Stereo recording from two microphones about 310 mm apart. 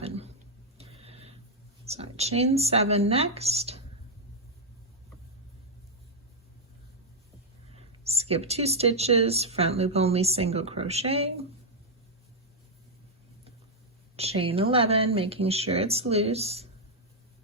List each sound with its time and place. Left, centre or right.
0.0 s a sound: centre
1.9 s speech: centre
8.0 s speech: centre
14.2 s speech: centre